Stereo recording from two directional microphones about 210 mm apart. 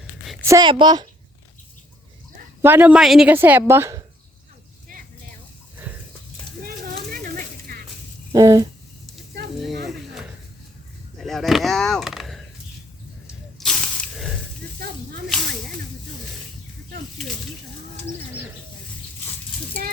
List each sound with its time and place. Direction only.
0.4 s a woman's voice: 20° right (ahead or behind)
2.6 s a woman's voice: 10° right (ahead or behind)
6.7 s a sound: 45° right (ahead or behind)
8.3 s speech: 15° right (ahead or behind)
9.6 s a sound: centre (ahead or behind)
11.2 s speech: centre (ahead or behind)
13.2 s snake: centre (ahead or behind)